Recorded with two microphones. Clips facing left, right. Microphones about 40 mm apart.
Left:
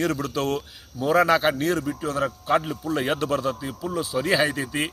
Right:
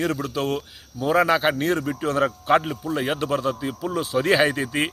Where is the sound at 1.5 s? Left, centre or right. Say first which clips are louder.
Right 1 dB; right.